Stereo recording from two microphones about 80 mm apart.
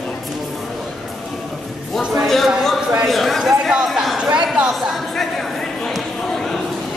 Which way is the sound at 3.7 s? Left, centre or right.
Centre.